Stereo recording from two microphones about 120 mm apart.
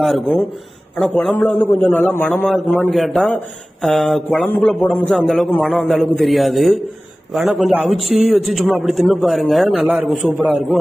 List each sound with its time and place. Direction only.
0.0 s a man's voice: 5° left (ahead or behind)
2.9 s a man's voice: centre (ahead or behind)
9.8 s a man's voice: 10° right (ahead or behind)